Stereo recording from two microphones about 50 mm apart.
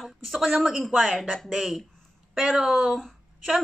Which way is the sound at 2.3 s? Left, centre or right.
Centre.